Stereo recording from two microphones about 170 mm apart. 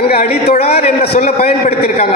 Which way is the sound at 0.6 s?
40° left (ahead or behind).